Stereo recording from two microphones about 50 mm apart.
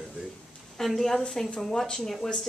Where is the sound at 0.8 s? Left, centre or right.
Centre.